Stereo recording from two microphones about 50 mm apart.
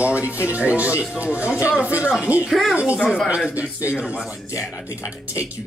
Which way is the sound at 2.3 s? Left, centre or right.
Right.